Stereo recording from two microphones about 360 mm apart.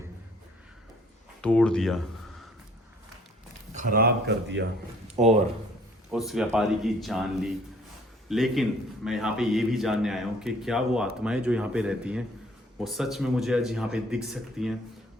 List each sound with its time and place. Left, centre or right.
1.4 s a man's voice: centre
3.8 s speech: right
5.1 s speech: centre
6.1 s a man's voice: centre